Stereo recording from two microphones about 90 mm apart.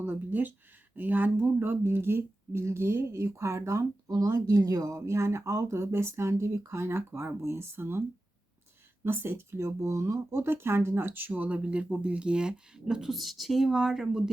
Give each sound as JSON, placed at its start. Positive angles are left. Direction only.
{"t": 0.0, "sound": "speech", "side_deg": -20}
{"t": 4.1, "sound": "speech", "side_deg": -45}
{"t": 9.0, "sound": "speech", "side_deg": -25}